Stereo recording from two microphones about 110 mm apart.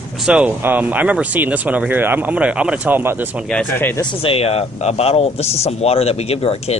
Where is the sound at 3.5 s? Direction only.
15° left (ahead or behind).